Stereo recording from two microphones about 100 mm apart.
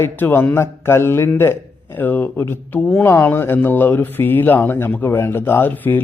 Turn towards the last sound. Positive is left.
turn(degrees=20)  # may be behind; listen again after turning